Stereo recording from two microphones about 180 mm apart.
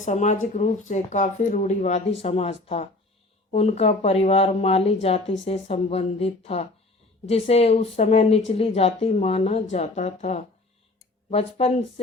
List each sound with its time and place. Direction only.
0.0 s speech: 40° left (ahead or behind)